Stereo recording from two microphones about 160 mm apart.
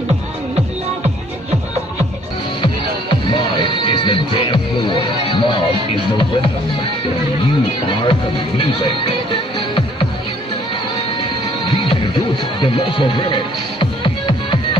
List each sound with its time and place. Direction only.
2.6 s music: 30° left (ahead or behind)
7.8 s music: 30° left (ahead or behind)
12.5 s music: 30° left (ahead or behind)